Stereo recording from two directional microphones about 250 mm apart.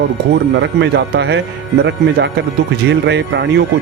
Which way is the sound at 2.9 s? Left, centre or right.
Right.